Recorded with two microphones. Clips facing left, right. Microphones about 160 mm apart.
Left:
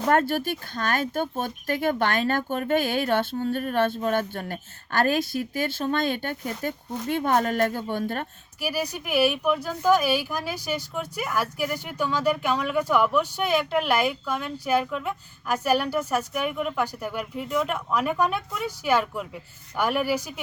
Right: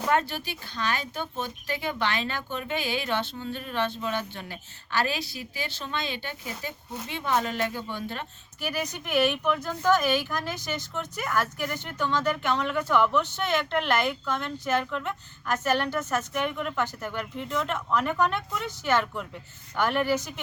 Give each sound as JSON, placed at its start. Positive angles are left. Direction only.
{"t": 0.1, "sound": "speech", "side_deg": 50}
{"t": 8.6, "sound": "speech", "side_deg": 10}